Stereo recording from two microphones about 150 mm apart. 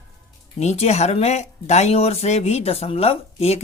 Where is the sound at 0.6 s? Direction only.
45° left (ahead or behind).